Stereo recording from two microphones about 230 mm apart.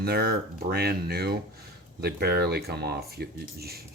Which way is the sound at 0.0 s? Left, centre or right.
Right.